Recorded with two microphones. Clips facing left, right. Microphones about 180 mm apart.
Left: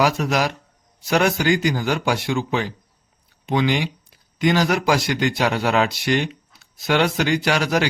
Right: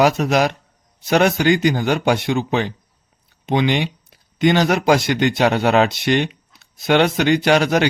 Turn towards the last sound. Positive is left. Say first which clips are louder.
# right 5 dB
turn(degrees=-25)  # may be behind; listen again after turning